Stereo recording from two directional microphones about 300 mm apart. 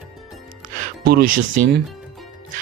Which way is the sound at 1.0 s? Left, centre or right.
Right.